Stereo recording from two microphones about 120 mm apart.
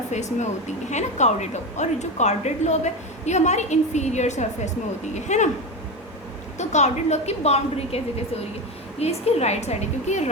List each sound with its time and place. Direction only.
0.1 s a woman's voice: 75° left (ahead or behind)
6.6 s a woman's voice: 75° left (ahead or behind)